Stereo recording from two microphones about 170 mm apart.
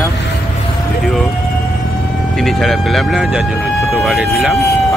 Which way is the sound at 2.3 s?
Centre (ahead or behind).